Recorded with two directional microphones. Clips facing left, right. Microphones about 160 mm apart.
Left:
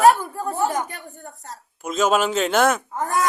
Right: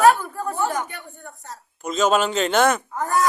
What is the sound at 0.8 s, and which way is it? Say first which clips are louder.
Speech: left 1 dB; 35° left (ahead or behind).